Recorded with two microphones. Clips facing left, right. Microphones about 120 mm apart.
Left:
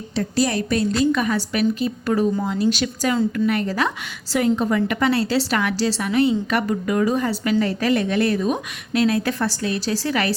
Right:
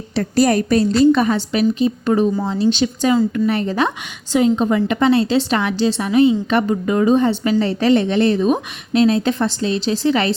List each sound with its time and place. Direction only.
0.2 s a woman's voice: 50° right (ahead or behind); by 10.3 s 25° right (ahead or behind)